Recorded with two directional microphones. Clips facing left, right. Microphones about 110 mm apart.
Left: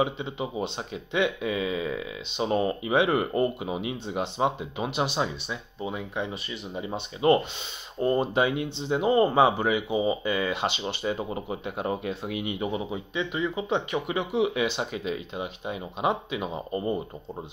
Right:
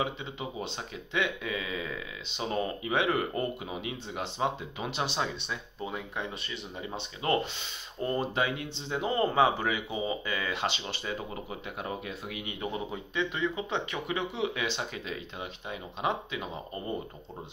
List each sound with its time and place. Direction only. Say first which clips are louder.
0.0 s speech: left 6 dB; 20° left (ahead or behind); by 6.6 s 5° left (ahead or behind)
6.7 s speech: left 8 dB; 20° left (ahead or behind)
12.5 s speech: left 5 dB; 10° left (ahead or behind)